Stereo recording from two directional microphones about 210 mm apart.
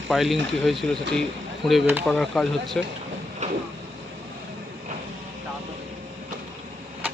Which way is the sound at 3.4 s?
35° right (ahead or behind).